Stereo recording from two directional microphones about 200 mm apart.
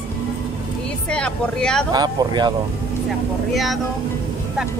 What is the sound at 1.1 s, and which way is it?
Speech, 5° left (ahead or behind).